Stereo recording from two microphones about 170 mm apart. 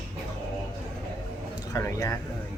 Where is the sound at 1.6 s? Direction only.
20° left (ahead or behind).